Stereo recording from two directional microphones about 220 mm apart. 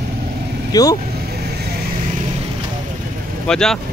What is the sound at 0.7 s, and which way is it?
Speech, 15° left (ahead or behind).